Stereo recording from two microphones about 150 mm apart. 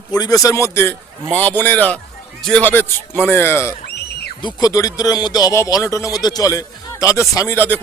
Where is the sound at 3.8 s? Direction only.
90° left.